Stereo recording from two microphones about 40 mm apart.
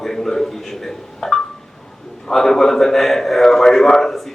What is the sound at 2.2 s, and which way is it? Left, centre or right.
A man's voice, centre.